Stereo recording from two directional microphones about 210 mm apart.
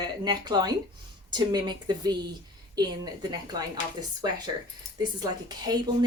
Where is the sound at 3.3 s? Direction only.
20° right (ahead or behind).